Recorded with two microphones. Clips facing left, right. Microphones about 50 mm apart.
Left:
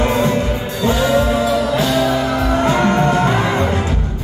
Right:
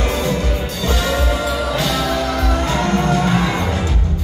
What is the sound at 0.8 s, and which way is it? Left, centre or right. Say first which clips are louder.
Music: left 5 dB; centre.